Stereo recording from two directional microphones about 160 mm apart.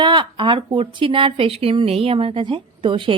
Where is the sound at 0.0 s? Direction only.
30° right (ahead or behind).